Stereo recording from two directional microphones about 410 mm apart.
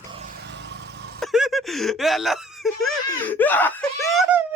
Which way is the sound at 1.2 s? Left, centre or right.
Centre.